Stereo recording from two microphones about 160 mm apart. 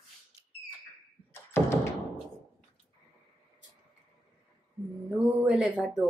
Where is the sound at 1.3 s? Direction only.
15° left (ahead or behind).